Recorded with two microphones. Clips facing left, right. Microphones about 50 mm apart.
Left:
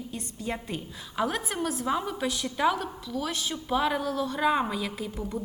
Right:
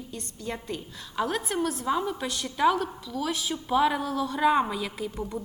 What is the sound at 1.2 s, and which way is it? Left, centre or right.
A woman's voice, centre.